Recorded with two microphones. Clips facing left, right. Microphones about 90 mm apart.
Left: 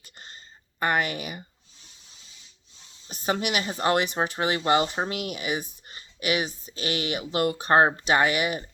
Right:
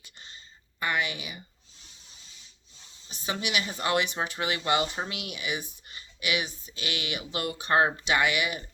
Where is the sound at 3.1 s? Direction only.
45° left (ahead or behind).